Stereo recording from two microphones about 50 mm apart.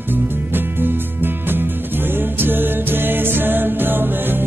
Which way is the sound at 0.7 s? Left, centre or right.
Right.